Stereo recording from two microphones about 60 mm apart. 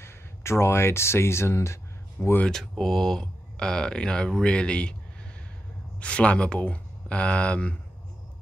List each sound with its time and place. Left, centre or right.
0.0 s speech: left
2.2 s speech: left
2.5 s speech: centre
5.9 s speech: centre